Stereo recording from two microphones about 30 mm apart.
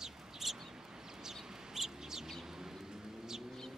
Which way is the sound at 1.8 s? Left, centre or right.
Centre.